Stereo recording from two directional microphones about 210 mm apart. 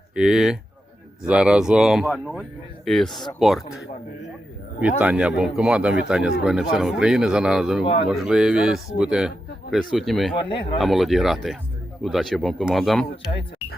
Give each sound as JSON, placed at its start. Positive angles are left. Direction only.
{"t": 0.1, "sound": "speech", "side_deg": -5}
{"t": 3.1, "sound": "speech", "side_deg": 20}
{"t": 3.4, "sound": "speech", "side_deg": 0}